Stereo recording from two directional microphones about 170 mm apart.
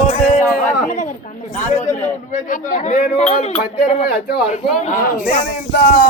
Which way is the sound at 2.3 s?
50° left (ahead or behind).